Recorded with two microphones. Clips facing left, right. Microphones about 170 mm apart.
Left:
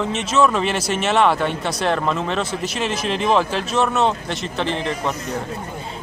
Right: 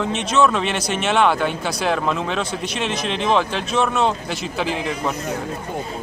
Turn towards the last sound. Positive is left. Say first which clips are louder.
# even
turn(degrees=-5)  # may be behind; listen again after turning